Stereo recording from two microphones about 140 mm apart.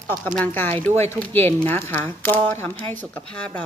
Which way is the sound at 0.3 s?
10° left (ahead or behind).